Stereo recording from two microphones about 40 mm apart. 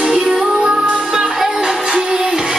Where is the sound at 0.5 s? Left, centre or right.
Centre.